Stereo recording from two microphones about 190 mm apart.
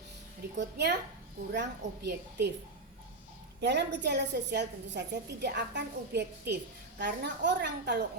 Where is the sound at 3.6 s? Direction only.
65° right (ahead or behind).